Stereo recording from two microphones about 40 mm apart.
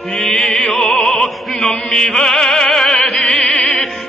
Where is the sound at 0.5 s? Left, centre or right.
Centre.